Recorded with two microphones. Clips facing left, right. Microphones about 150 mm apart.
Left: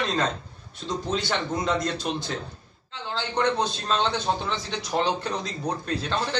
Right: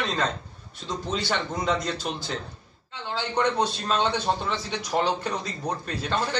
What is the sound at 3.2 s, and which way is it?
A man's voice, 10° right (ahead or behind).